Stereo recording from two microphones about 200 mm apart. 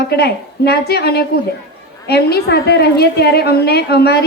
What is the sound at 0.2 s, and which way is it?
A woman's voice, 55° left (ahead or behind).